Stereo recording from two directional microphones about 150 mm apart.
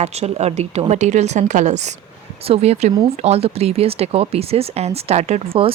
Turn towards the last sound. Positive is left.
turn(degrees=-40)  # may be behind; listen again after turning